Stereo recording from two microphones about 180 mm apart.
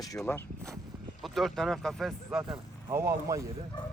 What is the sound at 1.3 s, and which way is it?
Speech, centre (ahead or behind).